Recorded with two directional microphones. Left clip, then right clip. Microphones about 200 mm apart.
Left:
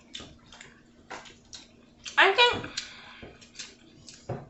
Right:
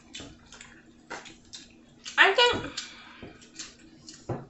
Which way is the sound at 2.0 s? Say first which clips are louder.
Even; 25° left (ahead or behind).